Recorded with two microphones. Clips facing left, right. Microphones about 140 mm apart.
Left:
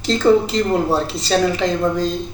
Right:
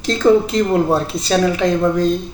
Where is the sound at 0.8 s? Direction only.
20° right (ahead or behind).